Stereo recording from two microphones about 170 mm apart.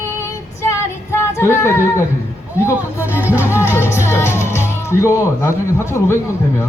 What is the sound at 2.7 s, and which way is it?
Speech, 15° left (ahead or behind).